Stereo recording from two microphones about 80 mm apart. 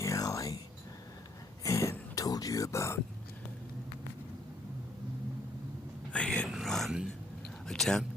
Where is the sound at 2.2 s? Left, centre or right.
Left.